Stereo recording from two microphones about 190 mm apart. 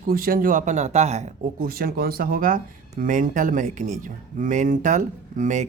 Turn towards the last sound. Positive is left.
turn(degrees=-40)  # may be behind; listen again after turning